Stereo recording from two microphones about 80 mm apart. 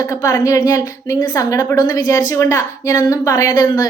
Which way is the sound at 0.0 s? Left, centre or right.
Left.